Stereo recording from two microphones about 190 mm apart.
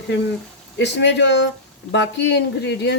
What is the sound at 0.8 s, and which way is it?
Speech, 65° left (ahead or behind).